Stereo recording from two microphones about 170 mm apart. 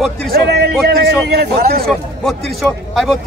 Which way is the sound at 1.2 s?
75° right (ahead or behind).